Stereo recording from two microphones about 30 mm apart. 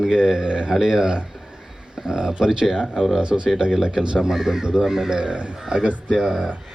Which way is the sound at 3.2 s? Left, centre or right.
Right.